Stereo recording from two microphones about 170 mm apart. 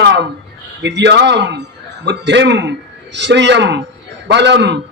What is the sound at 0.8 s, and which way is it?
A man's voice, 90° right.